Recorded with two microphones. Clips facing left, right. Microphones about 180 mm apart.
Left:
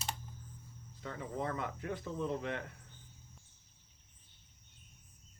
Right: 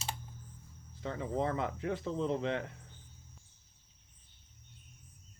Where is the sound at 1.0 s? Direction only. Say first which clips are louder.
Right 5 dB; 20° right (ahead or behind).